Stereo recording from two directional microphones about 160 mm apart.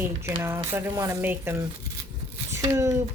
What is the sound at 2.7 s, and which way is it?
Speech, 20° right (ahead or behind).